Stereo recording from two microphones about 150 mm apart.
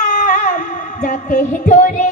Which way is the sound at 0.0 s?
55° left (ahead or behind).